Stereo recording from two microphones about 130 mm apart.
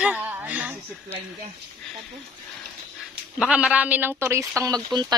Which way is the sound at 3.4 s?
5° right (ahead or behind).